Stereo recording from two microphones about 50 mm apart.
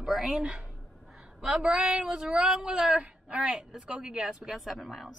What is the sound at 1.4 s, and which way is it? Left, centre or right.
Music, centre.